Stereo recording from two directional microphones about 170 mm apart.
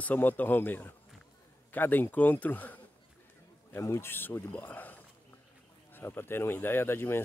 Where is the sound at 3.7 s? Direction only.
15° left (ahead or behind).